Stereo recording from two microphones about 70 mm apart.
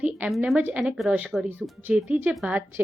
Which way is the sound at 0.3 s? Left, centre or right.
Centre.